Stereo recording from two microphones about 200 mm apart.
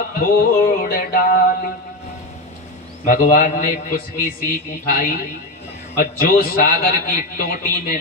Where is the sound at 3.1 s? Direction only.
45° left (ahead or behind).